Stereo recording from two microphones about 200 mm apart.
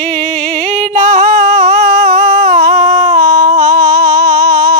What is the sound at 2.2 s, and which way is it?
Humming, 20° right (ahead or behind).